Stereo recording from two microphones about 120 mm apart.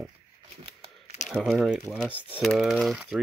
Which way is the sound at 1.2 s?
Centre (ahead or behind).